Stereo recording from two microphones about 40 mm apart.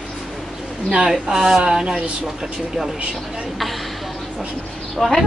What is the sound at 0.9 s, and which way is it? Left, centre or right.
Speech, centre.